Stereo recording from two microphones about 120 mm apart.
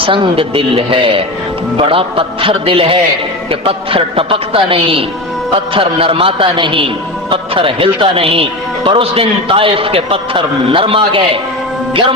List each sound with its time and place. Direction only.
0.0 s a man's voice: 45° right (ahead or behind)